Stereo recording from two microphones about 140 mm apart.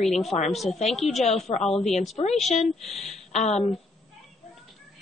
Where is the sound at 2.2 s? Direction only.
55° left (ahead or behind).